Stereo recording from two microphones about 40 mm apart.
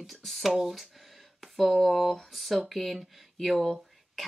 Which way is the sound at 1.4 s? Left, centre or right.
Centre.